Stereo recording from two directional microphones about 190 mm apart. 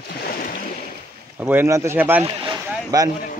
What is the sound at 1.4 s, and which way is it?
Speech, 10° right (ahead or behind).